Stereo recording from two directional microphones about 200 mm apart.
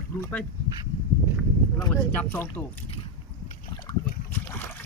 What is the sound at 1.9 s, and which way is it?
Speech, 10° left (ahead or behind).